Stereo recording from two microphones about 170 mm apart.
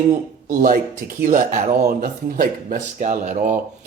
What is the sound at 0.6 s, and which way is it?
Speech, 55° right (ahead or behind).